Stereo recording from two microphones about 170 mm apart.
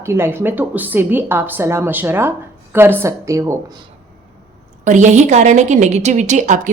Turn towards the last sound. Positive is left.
turn(degrees=-45)  # may be behind; listen again after turning